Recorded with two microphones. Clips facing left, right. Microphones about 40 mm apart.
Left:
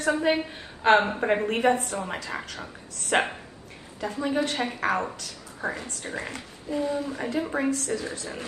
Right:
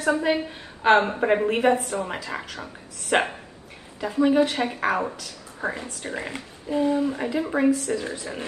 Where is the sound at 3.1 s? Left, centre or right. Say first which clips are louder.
Right 2 dB; centre.